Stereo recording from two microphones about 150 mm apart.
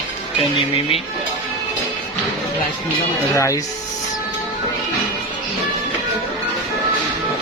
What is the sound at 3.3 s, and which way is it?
Speech, 20° left (ahead or behind).